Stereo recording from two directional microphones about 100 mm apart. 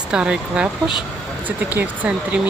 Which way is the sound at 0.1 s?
10° right (ahead or behind).